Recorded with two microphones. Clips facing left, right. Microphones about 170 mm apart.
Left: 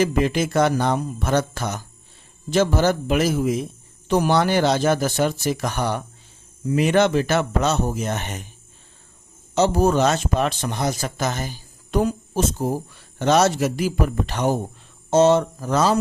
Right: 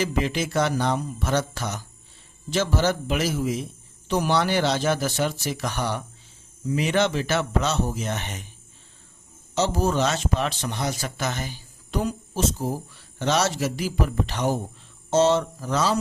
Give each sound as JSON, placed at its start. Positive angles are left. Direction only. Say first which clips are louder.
{"t": 0.0, "sound": "speech", "louder": "left 5 dB", "side_deg": 50}
{"t": 9.6, "sound": "speech", "louder": "left 5 dB", "side_deg": 50}